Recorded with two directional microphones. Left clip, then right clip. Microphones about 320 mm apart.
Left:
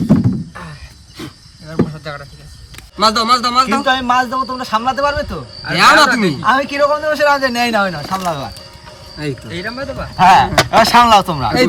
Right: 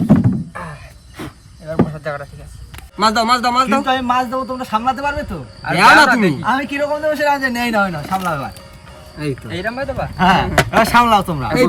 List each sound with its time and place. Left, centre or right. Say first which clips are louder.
0.1 s a sound: even; centre
3.0 s a man's voice: left 2 dB; centre
10.2 s a man's voice: left 5 dB; centre